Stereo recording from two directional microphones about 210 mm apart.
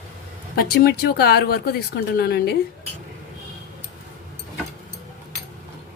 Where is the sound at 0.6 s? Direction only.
45° left (ahead or behind).